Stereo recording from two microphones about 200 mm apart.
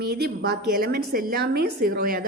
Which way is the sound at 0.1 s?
55° right (ahead or behind).